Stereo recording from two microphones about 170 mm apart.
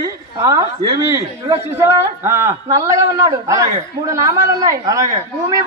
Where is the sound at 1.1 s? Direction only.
15° right (ahead or behind).